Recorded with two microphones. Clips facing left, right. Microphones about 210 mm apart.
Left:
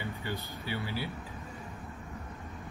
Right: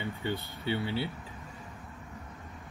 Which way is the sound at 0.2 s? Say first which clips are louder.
Right 8 dB; 25° right (ahead or behind).